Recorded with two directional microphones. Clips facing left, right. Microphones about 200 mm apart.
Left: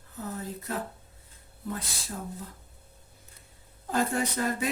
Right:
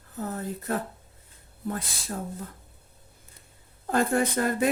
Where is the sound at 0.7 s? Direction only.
55° right (ahead or behind).